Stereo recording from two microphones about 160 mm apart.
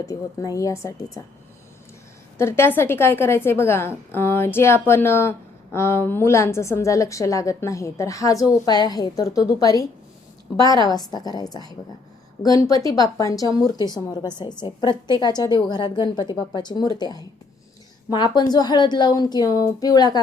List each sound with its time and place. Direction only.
0.0 s speech: 20° left (ahead or behind)
2.4 s a woman's voice: 15° left (ahead or behind)